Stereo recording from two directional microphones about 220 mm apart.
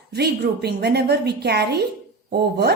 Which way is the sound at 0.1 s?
45° right (ahead or behind).